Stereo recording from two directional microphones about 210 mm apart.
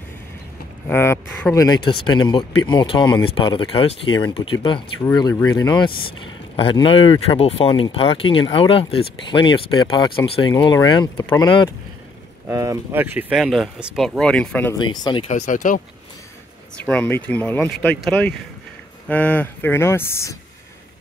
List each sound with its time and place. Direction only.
0.8 s speech: 10° left (ahead or behind)
12.4 s speech: 10° right (ahead or behind); by 14.8 s 5° left (ahead or behind)
14.8 s speech: 20° left (ahead or behind)
15.4 s speech: 40° left (ahead or behind)
16.8 s speech: 5° left (ahead or behind)